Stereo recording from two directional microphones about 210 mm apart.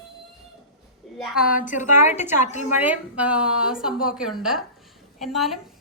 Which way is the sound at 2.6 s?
10° right (ahead or behind).